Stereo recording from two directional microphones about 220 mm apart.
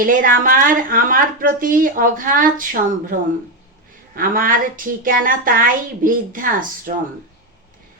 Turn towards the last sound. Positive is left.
turn(degrees=-40)  # may be behind; listen again after turning